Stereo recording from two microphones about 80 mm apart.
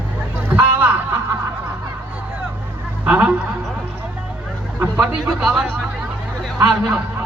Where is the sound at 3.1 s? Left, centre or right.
Centre.